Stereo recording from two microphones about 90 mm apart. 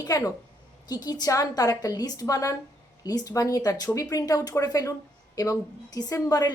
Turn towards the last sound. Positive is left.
turn(degrees=45)  # may be behind; listen again after turning